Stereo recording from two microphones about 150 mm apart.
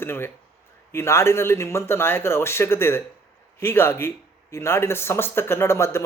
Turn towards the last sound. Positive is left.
turn(degrees=15)  # may be behind; listen again after turning